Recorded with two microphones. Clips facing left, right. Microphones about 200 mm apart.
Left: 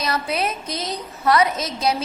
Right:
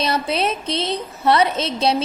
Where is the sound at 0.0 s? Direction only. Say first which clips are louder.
Right 3 dB; 30° right (ahead or behind).